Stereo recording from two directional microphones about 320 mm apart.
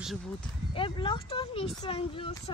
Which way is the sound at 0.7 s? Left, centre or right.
Centre.